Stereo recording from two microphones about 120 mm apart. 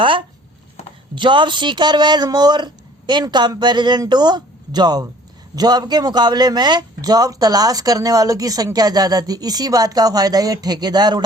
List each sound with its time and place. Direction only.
0.0 s a man's voice: 45° right (ahead or behind)